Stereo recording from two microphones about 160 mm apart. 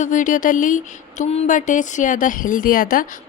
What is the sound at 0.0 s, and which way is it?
Speech, 55° left (ahead or behind).